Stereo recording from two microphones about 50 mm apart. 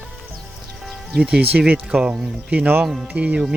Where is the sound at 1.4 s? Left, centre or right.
Right.